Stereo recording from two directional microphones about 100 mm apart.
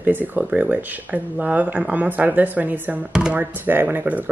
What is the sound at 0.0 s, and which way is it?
Speech, 20° right (ahead or behind).